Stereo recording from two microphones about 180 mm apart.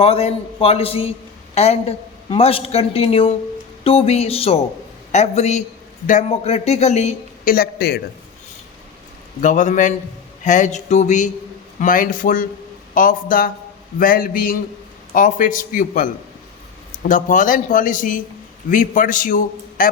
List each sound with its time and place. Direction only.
0.0 s a woman's voice: 35° left (ahead or behind)
7.4 s a man's voice: 55° left (ahead or behind)
9.4 s a woman's voice: 45° left (ahead or behind)